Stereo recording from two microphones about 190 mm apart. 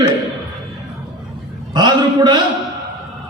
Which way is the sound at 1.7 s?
25° right (ahead or behind).